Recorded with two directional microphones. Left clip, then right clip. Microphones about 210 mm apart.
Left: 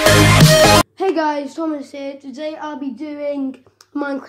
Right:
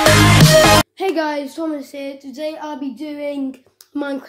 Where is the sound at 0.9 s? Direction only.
30° right (ahead or behind).